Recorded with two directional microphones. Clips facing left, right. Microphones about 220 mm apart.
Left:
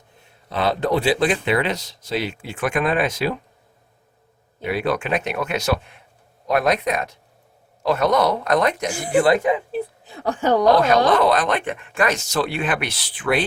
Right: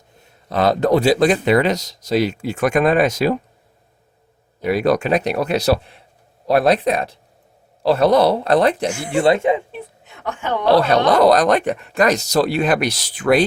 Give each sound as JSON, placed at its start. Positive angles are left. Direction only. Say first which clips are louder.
{"t": 0.5, "sound": "speech", "louder": "right 5 dB", "side_deg": -40}
{"t": 4.6, "sound": "speech", "louder": "right 6 dB", "side_deg": -40}
{"t": 9.7, "sound": "a sound", "louder": "left 7 dB", "side_deg": 35}
{"t": 10.7, "sound": "speech", "louder": "right 4 dB", "side_deg": -35}